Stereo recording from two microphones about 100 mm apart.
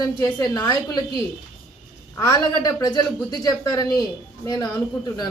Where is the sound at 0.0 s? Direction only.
40° left (ahead or behind).